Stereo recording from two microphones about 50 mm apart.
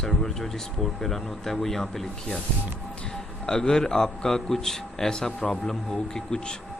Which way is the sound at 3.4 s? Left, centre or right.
Centre.